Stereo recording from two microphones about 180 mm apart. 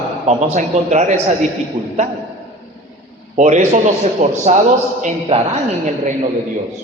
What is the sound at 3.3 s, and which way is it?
Speech, 45° right (ahead or behind).